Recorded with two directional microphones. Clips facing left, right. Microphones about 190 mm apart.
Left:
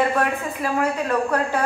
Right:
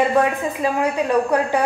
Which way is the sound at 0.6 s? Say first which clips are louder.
Right 2 dB; 15° right (ahead or behind).